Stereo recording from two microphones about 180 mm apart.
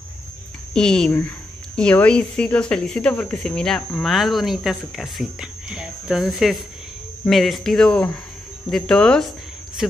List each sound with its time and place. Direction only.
0.7 s speech: 5° left (ahead or behind)